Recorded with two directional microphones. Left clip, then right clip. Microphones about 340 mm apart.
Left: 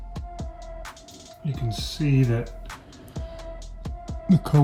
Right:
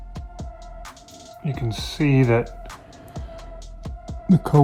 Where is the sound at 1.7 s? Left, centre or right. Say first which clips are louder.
Right 5 dB; centre.